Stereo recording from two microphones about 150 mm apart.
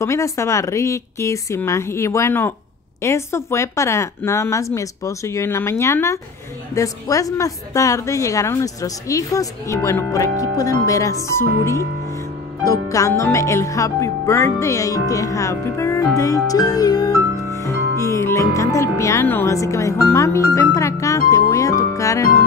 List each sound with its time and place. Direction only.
0.0 s a woman's voice: 20° left (ahead or behind)
16.2 s music: 20° left (ahead or behind)